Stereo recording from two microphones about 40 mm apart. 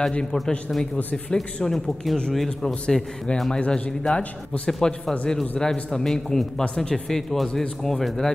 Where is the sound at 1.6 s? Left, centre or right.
Centre.